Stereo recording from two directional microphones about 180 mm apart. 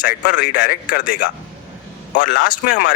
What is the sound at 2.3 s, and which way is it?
Speech, 45° left (ahead or behind).